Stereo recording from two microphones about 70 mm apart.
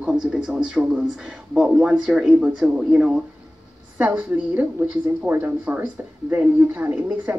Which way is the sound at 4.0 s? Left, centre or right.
Right.